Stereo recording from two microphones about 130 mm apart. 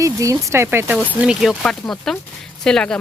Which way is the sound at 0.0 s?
25° right (ahead or behind).